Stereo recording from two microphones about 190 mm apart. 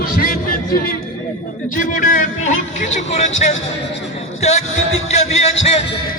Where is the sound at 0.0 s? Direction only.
50° left (ahead or behind).